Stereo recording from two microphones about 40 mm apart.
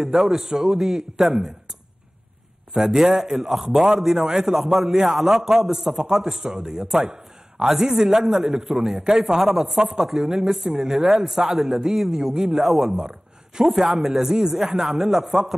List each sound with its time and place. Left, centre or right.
0.0 s a man's voice: centre
2.7 s a man's voice: centre
12.5 s a man's voice: centre